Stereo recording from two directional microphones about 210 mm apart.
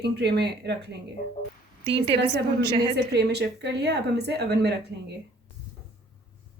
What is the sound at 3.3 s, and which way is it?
Speech, 50° right (ahead or behind).